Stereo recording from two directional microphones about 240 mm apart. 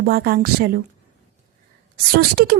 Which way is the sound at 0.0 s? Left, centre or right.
Right.